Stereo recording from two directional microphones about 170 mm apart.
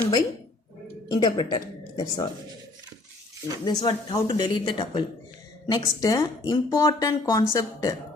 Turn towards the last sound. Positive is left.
turn(degrees=20)  # may be behind; listen again after turning